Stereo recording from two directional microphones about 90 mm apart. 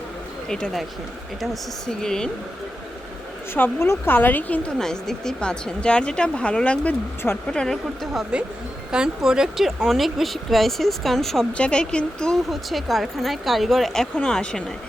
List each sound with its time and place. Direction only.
0.4 s speech: 5° left (ahead or behind)
1.9 s speech: 5° left (ahead or behind)
3.5 s a woman's voice: 30° left (ahead or behind)
4.8 s speech: 5° left (ahead or behind)
8.1 s speech: 10° right (ahead or behind); by 14.6 s 5° left (ahead or behind)